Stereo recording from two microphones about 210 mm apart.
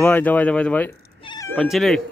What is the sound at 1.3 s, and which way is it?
Cat, 15° left (ahead or behind).